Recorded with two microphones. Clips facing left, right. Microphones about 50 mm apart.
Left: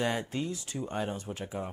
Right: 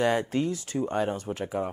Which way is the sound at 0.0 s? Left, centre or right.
Right.